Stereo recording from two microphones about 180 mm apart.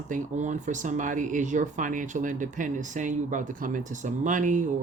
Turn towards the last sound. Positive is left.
turn(degrees=-45)  # may be behind; listen again after turning